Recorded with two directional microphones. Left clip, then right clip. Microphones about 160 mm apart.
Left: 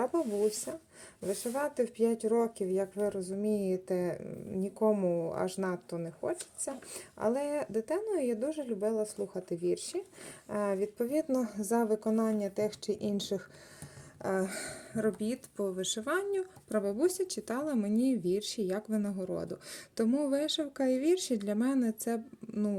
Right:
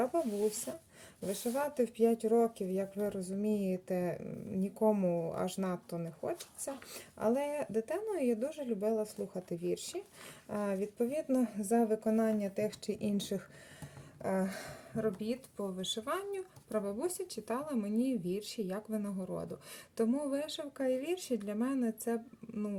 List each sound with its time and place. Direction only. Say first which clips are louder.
0.7 s speech: left 3 dB; 5° left (ahead or behind)
14.2 s speech: left 2 dB; 35° left (ahead or behind)